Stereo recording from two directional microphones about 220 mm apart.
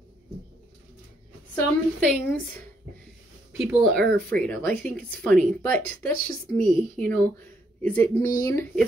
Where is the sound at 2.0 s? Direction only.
5° left (ahead or behind).